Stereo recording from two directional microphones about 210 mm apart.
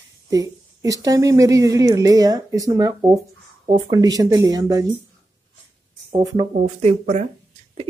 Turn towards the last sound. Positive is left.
turn(degrees=-35)  # may be behind; listen again after turning